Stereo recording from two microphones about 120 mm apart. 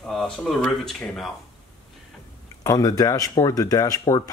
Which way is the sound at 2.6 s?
30° left (ahead or behind).